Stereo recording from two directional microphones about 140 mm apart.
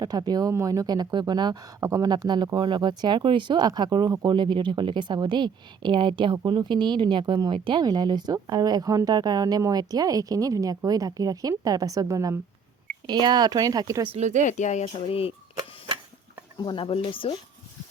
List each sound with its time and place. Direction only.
0.0 s speech: 25° right (ahead or behind)
14.1 s speech: 55° right (ahead or behind)
14.4 s speech: 60° left (ahead or behind)
16.6 s speech: 35° left (ahead or behind)